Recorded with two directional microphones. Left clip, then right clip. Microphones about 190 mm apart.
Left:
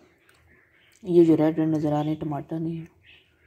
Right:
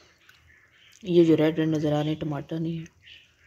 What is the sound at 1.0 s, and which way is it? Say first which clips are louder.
Speech: left 1 dB; 10° right (ahead or behind).